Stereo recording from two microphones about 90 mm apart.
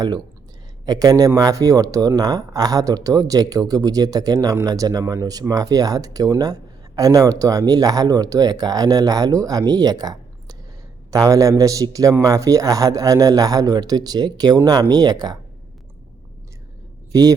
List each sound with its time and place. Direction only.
0.9 s a man's voice: 45° right (ahead or behind)
17.1 s speech: 40° right (ahead or behind)